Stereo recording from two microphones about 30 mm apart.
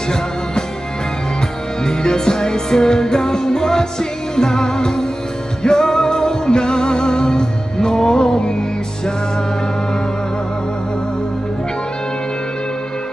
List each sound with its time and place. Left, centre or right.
1.9 s music: left